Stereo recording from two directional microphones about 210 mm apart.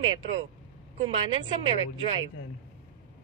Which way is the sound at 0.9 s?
25° right (ahead or behind).